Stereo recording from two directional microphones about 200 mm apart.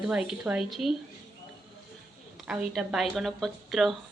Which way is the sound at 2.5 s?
5° right (ahead or behind).